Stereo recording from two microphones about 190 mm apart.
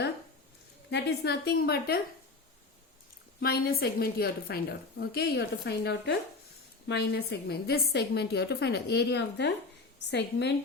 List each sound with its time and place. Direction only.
0.9 s a woman's voice: 65° left (ahead or behind)
3.4 s a woman's voice: 55° left (ahead or behind)